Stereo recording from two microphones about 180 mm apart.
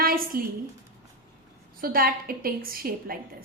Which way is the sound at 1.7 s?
55° right (ahead or behind).